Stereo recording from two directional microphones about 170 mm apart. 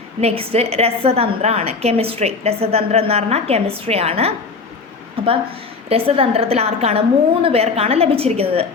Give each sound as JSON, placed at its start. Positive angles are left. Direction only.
{"t": 0.2, "sound": "a woman's voice", "side_deg": -35}
{"t": 5.9, "sound": "a woman's voice", "side_deg": -35}